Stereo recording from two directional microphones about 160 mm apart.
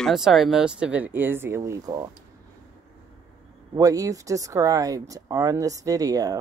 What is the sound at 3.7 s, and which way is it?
Speech, 20° right (ahead or behind).